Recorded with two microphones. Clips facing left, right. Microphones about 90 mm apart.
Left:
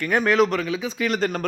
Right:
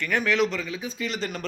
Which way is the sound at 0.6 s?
85° left.